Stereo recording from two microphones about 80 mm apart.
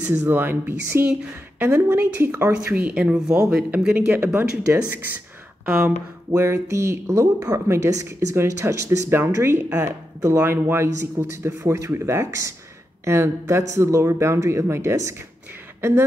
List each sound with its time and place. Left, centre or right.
0.1 s speech: right
2.5 s speech: centre
6.3 s speech: right
9.1 s speech: right